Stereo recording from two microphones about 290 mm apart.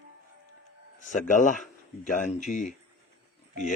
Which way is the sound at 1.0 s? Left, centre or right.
Left.